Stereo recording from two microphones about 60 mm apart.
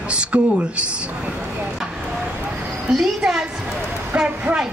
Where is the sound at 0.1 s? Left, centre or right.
Centre.